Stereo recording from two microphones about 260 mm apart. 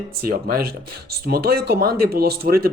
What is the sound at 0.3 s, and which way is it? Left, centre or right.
Speech, right.